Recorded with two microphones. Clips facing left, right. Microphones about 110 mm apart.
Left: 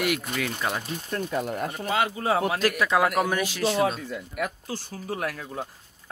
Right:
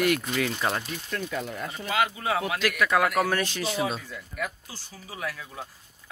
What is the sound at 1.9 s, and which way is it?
Speech, 30° left (ahead or behind).